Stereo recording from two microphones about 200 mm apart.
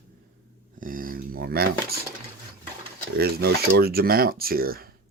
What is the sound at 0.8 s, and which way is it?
Speech, 45° right (ahead or behind).